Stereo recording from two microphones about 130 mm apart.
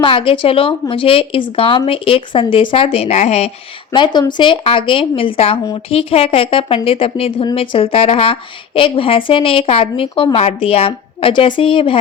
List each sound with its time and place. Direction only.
0.0 s a woman's voice: 40° left (ahead or behind); by 3.5 s 60° left (ahead or behind)
3.9 s a woman's voice: 35° left (ahead or behind)